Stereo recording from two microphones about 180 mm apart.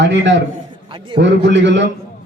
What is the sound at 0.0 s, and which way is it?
Speech, 80° right.